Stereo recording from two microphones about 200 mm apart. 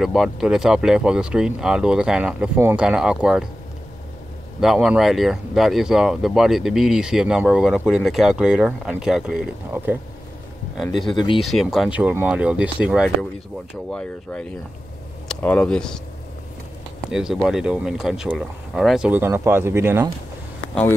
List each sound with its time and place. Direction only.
0.0 s speech: centre (ahead or behind)
4.6 s speech: 5° right (ahead or behind)
11.1 s speech: 25° left (ahead or behind)
11.4 s speech: centre (ahead or behind)
17.1 s speech: 5° right (ahead or behind)